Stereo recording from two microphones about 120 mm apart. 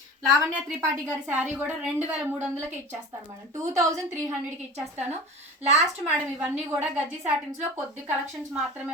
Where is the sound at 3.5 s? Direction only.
30° right (ahead or behind).